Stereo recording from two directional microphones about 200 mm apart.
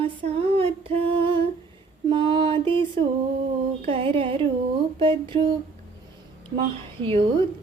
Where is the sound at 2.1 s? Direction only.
25° right (ahead or behind).